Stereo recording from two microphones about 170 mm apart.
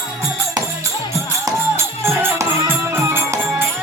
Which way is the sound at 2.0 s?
15° right (ahead or behind).